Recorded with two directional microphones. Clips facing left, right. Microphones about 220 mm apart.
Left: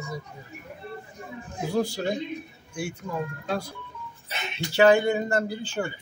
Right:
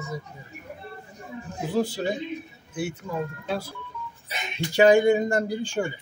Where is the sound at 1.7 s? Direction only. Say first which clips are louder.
Right 1 dB; 5° right (ahead or behind).